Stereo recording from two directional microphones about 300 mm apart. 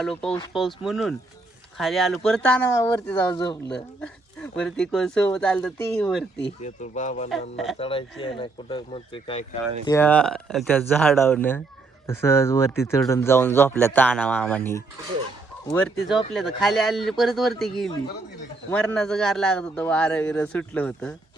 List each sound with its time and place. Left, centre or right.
0.0 s a man's voice: centre
3.7 s a man's voice: centre
6.6 s speech: left
7.5 s a man's voice: centre
7.8 s speech: centre
9.8 s a man's voice: centre
16.0 s a man's voice: centre